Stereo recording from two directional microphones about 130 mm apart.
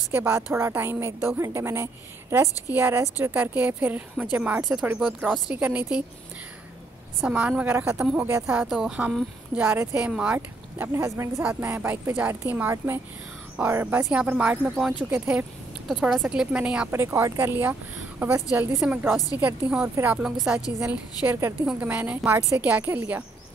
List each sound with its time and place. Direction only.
0.1 s a woman's voice: 20° right (ahead or behind)
7.2 s a woman's voice: 10° right (ahead or behind)
8.5 s a woman's voice: 5° right (ahead or behind)
16.9 s a woman's voice: 20° right (ahead or behind)